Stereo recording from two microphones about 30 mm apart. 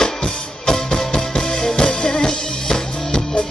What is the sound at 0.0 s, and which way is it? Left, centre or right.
Music, left.